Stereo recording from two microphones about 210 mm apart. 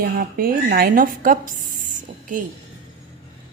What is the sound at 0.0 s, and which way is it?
A woman's voice, 45° right (ahead or behind).